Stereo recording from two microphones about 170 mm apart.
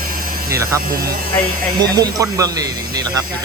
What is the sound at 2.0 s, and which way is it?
Speech, 20° right (ahead or behind).